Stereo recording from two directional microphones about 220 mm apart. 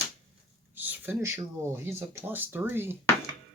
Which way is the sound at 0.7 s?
10° right (ahead or behind).